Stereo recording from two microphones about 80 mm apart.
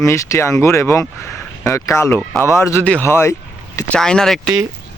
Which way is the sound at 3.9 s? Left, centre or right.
Centre.